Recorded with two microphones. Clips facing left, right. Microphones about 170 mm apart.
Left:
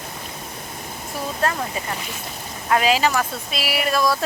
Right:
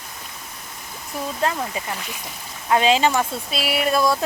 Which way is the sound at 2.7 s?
25° right (ahead or behind).